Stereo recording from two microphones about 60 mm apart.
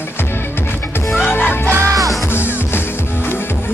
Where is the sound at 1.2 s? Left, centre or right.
Left.